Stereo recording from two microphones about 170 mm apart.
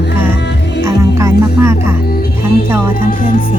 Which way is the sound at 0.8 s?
15° right (ahead or behind).